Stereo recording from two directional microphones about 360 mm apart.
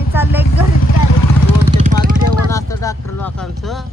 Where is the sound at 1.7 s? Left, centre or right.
Centre.